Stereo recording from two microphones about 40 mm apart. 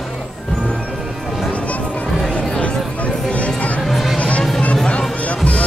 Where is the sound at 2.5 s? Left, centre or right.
Left.